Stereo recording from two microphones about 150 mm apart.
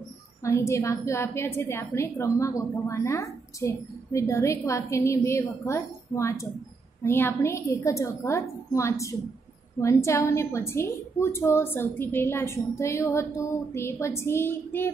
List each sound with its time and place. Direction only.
0.4 s a woman's voice: 20° left (ahead or behind)